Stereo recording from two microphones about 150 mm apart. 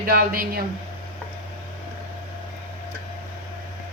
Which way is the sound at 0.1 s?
80° right.